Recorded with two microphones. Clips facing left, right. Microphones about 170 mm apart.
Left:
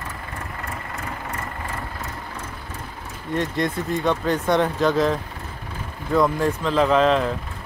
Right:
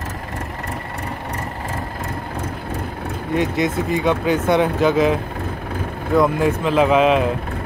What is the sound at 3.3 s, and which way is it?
Speech, 5° right (ahead or behind).